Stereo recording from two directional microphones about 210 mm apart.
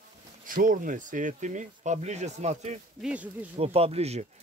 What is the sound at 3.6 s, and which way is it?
Speech, 30° right (ahead or behind).